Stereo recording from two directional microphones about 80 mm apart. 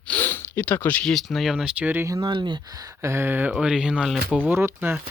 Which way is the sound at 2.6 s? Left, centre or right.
Right.